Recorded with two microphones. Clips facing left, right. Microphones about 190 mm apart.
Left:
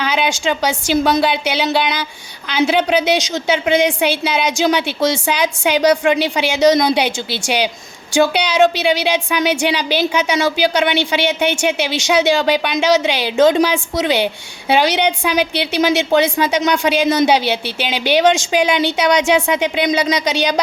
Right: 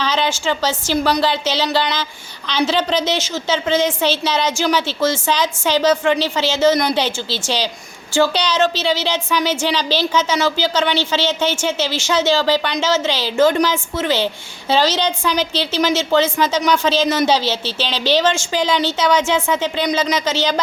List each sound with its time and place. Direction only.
0.0 s a woman's voice: 10° left (ahead or behind)